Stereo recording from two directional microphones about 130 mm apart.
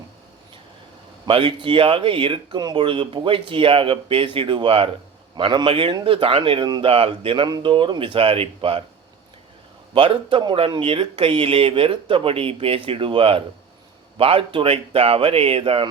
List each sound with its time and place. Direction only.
1.2 s speech: 40° right (ahead or behind)
6.8 s speech: 45° right (ahead or behind)
9.9 s speech: 45° right (ahead or behind)